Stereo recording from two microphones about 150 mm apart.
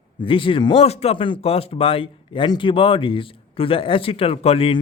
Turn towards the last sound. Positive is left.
turn(degrees=40)  # may be behind; listen again after turning